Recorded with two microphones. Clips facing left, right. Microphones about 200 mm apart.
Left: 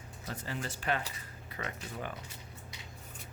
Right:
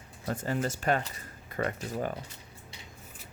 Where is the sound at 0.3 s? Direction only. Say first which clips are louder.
Right 9 dB; 45° right (ahead or behind).